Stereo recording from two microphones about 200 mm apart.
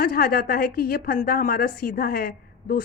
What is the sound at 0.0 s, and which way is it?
Speech, 45° left (ahead or behind).